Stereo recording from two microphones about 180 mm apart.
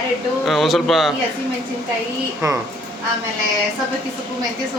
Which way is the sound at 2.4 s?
20° right (ahead or behind).